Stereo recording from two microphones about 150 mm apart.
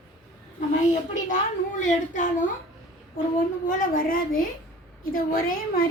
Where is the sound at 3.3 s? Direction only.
65° left (ahead or behind).